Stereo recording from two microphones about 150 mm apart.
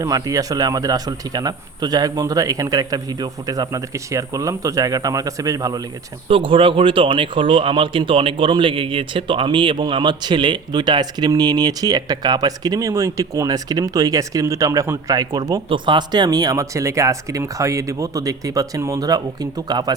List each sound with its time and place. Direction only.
0.0 s speech: 25° right (ahead or behind)
6.2 s speech: 35° right (ahead or behind)